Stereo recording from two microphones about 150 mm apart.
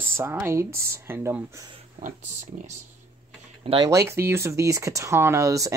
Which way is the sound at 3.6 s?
30° right (ahead or behind).